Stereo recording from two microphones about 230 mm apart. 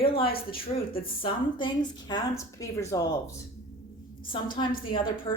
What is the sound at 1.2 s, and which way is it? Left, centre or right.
A woman's voice, left.